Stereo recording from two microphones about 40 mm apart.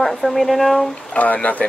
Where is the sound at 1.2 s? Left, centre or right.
Left.